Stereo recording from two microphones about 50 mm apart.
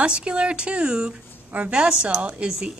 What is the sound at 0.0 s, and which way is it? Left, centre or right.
A woman's voice, right.